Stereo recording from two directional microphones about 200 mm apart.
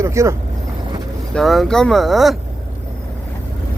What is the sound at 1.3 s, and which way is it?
Speech, centre (ahead or behind).